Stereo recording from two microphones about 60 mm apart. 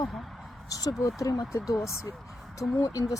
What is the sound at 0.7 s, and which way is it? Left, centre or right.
A woman's voice, left.